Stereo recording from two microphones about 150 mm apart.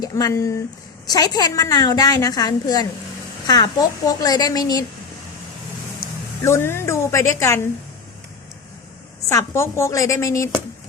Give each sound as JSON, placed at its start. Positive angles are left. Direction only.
{"t": 0.0, "sound": "a woman's voice", "side_deg": 25}
{"t": 6.4, "sound": "a woman's voice", "side_deg": 15}
{"t": 9.3, "sound": "a woman's voice", "side_deg": 20}